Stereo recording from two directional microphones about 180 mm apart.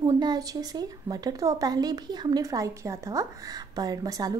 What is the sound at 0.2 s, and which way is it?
A woman's voice, 20° right (ahead or behind).